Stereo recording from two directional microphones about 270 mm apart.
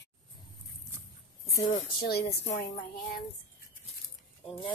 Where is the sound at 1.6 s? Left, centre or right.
Left.